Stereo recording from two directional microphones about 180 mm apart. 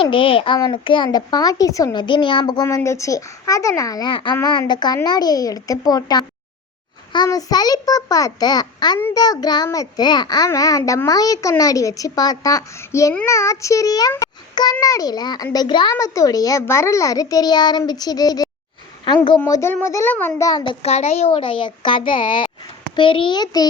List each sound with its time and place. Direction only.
0.0 s a child's voice: 30° left (ahead or behind); by 20.5 s 10° left (ahead or behind)
20.5 s a child's voice: 25° left (ahead or behind)
20.8 s a child's voice: 35° left (ahead or behind)